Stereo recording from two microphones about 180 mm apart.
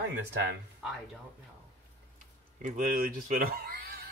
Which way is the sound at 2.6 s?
50° right (ahead or behind).